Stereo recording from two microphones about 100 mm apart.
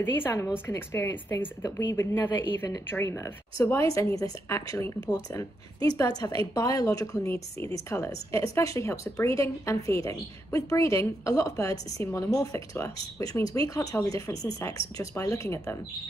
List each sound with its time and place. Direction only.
0.1 s a woman's voice: 25° left (ahead or behind)